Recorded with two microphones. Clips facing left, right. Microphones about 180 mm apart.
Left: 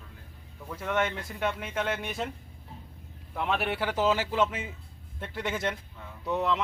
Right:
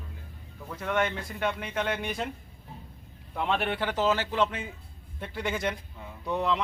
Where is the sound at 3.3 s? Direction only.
5° left (ahead or behind).